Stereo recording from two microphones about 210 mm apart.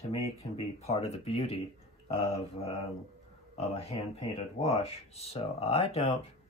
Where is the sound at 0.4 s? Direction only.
30° left (ahead or behind).